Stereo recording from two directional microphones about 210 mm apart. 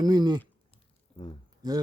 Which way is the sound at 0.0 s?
20° right (ahead or behind).